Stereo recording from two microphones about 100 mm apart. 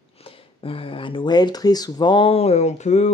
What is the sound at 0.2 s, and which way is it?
Speech, 65° left (ahead or behind).